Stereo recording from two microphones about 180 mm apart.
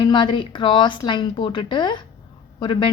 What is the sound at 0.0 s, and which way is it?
Speech, 25° left (ahead or behind).